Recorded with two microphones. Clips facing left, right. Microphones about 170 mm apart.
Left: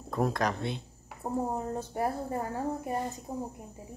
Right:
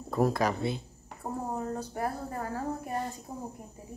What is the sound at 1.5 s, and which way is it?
A woman's voice, 20° left (ahead or behind).